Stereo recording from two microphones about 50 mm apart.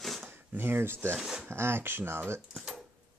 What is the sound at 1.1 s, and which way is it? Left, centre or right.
Speech, centre.